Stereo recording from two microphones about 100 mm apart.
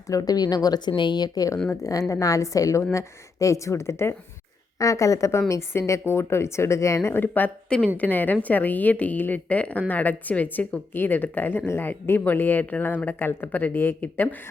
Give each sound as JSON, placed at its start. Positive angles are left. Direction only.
{"t": 0.1, "sound": "a woman's voice", "side_deg": 40}